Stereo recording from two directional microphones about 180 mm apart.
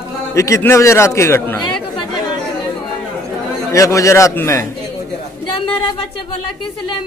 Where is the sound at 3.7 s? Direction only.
15° left (ahead or behind).